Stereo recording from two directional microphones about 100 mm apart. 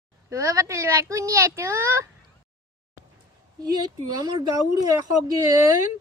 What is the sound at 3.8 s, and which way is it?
Speech, 40° right (ahead or behind).